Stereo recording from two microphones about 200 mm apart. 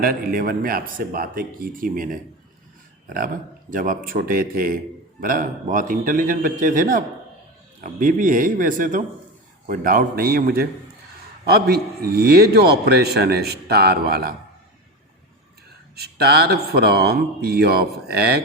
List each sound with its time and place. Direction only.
0.0 s speech: 45° right (ahead or behind)
3.7 s speech: 45° right (ahead or behind)
11.7 s speech: 50° right (ahead or behind)
16.0 s speech: 55° right (ahead or behind)